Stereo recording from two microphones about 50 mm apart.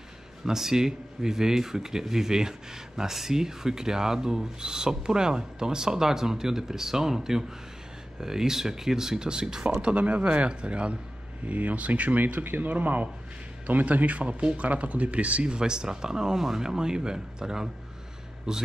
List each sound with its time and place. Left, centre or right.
0.5 s speech: centre